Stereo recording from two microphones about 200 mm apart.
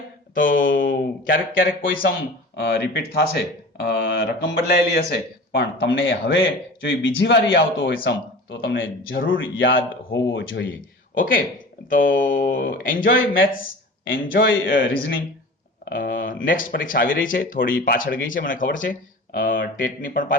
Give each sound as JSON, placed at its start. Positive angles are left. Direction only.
{"t": 0.3, "sound": "a man's voice", "side_deg": 45}
{"t": 10.8, "sound": "a man's voice", "side_deg": 45}